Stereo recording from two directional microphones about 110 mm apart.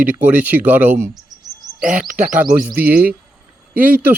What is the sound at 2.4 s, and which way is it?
Speech, 15° right (ahead or behind).